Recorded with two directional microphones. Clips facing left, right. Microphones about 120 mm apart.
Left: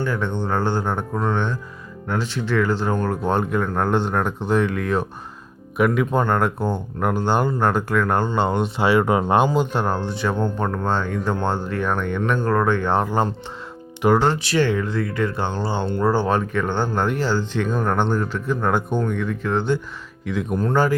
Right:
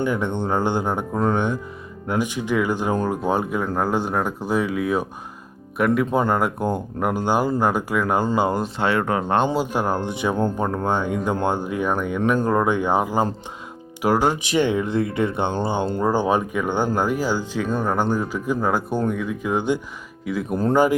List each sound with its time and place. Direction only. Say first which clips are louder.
0.0 s speech: right 1 dB; 15° right (ahead or behind); by 9.5 s 10° left (ahead or behind)
9.6 s speech: left 1 dB; 10° right (ahead or behind)